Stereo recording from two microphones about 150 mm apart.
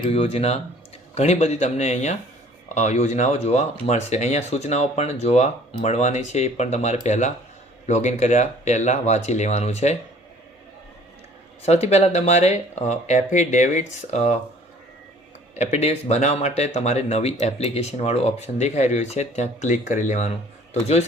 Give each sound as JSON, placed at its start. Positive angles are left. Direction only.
{"t": 0.0, "sound": "speech", "side_deg": 40}
{"t": 11.6, "sound": "speech", "side_deg": 45}
{"t": 15.5, "sound": "speech", "side_deg": 50}